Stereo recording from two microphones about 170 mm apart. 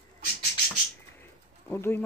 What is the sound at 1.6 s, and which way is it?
Speech, 15° left (ahead or behind).